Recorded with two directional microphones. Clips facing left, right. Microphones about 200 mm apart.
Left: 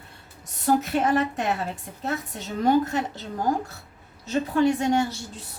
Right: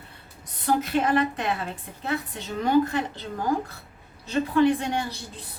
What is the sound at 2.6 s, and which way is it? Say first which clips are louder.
A woman's voice: even; 45° left (ahead or behind).